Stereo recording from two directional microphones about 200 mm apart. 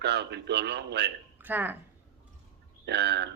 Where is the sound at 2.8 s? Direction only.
55° right (ahead or behind).